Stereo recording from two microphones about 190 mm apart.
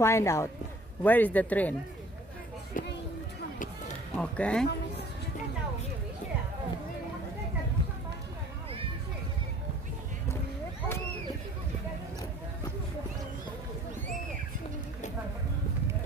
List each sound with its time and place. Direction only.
0.0 s a man's voice: 15° left (ahead or behind)
2.8 s a sound: 45° left (ahead or behind)
4.2 s a man's voice: 5° left (ahead or behind)